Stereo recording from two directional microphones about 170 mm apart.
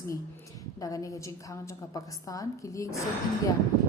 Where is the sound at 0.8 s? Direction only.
20° left (ahead or behind).